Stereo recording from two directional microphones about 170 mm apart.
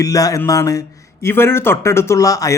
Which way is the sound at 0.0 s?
20° left (ahead or behind).